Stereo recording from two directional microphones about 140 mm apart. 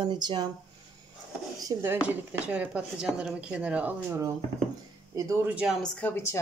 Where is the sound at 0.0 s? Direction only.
35° right (ahead or behind).